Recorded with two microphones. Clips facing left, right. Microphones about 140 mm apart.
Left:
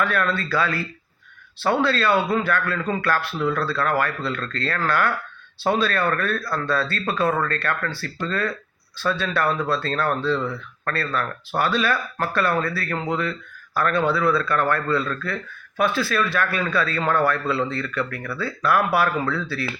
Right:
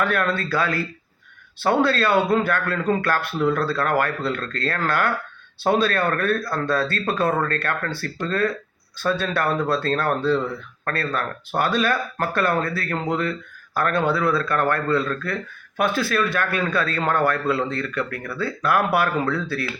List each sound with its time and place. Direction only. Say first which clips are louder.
0.0 s a man's voice: right 1 dB; 50° right (ahead or behind)